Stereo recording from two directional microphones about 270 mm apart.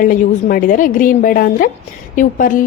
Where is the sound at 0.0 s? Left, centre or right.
Left.